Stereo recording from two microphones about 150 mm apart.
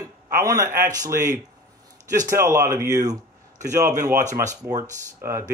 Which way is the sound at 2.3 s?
20° right (ahead or behind).